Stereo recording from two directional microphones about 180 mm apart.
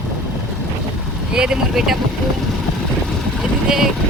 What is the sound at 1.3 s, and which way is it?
Speech, 5° right (ahead or behind).